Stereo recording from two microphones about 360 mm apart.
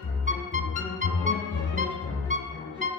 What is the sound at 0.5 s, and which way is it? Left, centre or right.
Music, centre.